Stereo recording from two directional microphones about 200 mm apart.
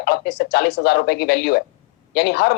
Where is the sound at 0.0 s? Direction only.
55° left (ahead or behind).